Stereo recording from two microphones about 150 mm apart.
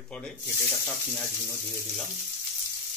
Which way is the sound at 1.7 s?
Centre (ahead or behind).